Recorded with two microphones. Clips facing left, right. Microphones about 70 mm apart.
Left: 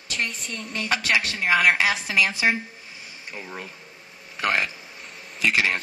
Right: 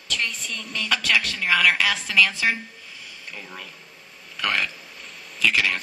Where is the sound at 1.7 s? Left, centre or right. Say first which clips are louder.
Right 1 dB; left.